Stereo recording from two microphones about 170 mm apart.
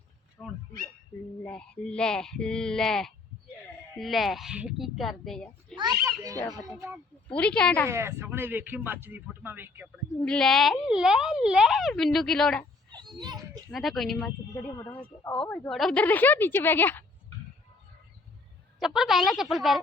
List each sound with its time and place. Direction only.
1.5 s speech: 5° left (ahead or behind)
5.7 s a child's voice: 25° right (ahead or behind)
7.3 s a woman's voice: 5° left (ahead or behind)
7.9 s speech: 15° right (ahead or behind)
10.2 s speech: 5° left (ahead or behind)
12.9 s children playing: 25° right (ahead or behind)
13.7 s speech: centre (ahead or behind)
14.5 s a woman's voice: 15° left (ahead or behind)
15.2 s speech: 25° left (ahead or behind)
15.4 s a woman's voice: 10° left (ahead or behind)
18.8 s speech: centre (ahead or behind)